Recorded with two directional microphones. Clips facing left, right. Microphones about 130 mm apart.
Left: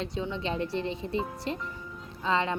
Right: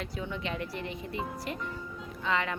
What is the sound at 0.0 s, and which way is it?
Speech, 25° left (ahead or behind).